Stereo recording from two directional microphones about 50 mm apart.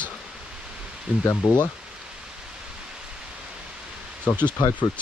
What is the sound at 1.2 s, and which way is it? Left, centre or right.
Speech, left.